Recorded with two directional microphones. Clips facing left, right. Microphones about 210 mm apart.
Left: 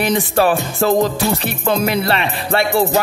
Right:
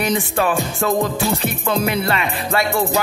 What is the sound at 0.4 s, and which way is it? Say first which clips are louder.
Music: left 6 dB; 35° left (ahead or behind).